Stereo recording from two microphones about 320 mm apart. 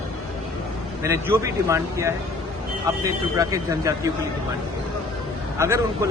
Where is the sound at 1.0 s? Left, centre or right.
Centre.